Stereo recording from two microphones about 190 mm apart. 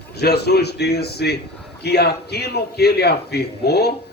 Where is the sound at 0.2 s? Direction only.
60° left (ahead or behind).